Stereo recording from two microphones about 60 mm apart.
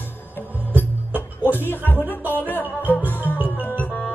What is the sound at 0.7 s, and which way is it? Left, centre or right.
Music, left.